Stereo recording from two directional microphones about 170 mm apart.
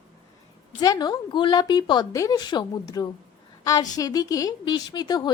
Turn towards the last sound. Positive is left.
turn(degrees=25)  # may be behind; listen again after turning